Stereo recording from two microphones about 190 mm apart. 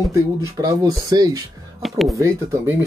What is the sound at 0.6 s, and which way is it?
Speech, 20° right (ahead or behind).